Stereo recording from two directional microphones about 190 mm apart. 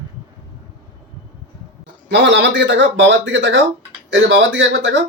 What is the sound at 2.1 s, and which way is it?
Speech, 70° right (ahead or behind).